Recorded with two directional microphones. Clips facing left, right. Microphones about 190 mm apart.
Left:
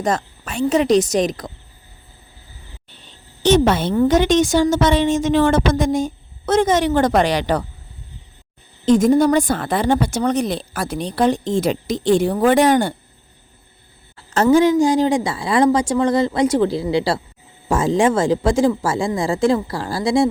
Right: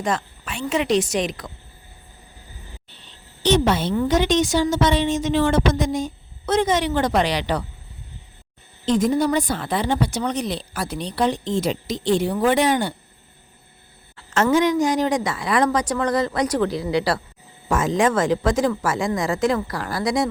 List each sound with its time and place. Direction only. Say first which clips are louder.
0.0 s a woman's voice: left 4 dB; 40° left (ahead or behind)
3.4 s a woman's voice: left 4 dB; 50° left (ahead or behind)
8.9 s a woman's voice: left 6 dB; 45° left (ahead or behind)
14.5 s speech: left 6 dB; 30° left (ahead or behind)